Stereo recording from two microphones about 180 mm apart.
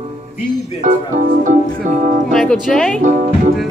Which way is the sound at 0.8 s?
45° right (ahead or behind).